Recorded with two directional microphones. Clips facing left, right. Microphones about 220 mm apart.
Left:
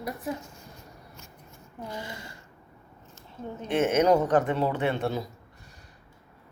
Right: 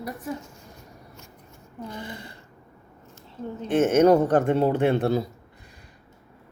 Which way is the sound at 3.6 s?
45° right (ahead or behind).